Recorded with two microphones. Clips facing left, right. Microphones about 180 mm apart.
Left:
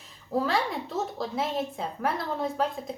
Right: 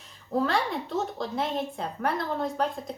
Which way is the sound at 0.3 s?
Centre (ahead or behind).